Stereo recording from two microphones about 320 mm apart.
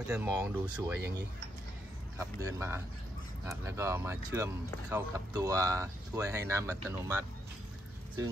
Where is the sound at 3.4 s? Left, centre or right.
Centre.